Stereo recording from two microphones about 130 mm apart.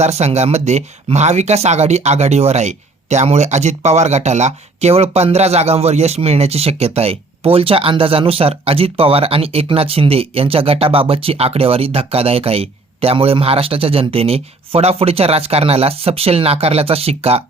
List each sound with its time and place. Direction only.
0.0 s speech: 55° right (ahead or behind)